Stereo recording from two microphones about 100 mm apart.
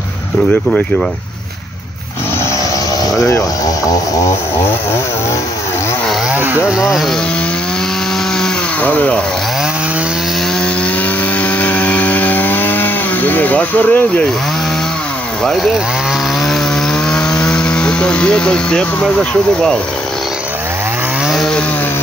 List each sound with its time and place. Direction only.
6.3 s a sound: 20° right (ahead or behind)
6.6 s speech: 5° right (ahead or behind)
8.4 s chainsaw: 15° left (ahead or behind)
11.4 s chainsaw: 15° left (ahead or behind)
15.4 s speech: 5° left (ahead or behind)
17.1 s speech: 10° left (ahead or behind)
21.3 s chainsaw: 5° left (ahead or behind)